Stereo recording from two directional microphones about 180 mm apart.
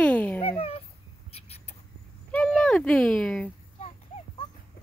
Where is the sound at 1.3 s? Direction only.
35° left (ahead or behind).